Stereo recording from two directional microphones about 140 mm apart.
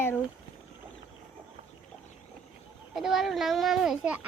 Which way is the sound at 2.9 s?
Centre (ahead or behind).